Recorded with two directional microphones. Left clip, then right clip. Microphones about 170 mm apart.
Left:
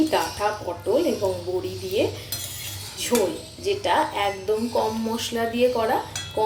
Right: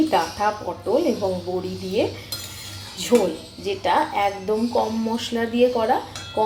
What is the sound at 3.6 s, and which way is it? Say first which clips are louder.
A woman's voice: right 1 dB; 10° right (ahead or behind).